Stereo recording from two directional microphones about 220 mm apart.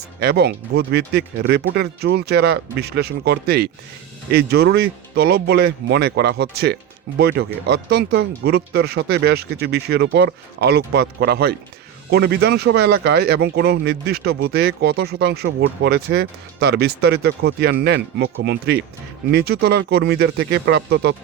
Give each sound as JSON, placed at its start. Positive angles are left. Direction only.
{"t": 0.2, "sound": "speech", "side_deg": -45}